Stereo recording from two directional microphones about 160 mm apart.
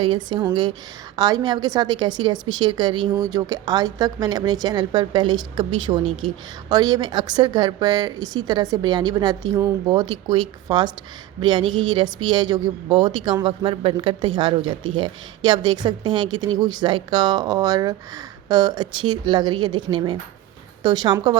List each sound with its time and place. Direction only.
0.0 s speech: 30° right (ahead or behind)